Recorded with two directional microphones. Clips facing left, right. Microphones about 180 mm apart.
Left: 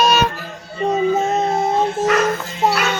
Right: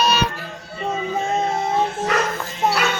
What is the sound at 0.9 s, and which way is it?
Music, 40° left (ahead or behind).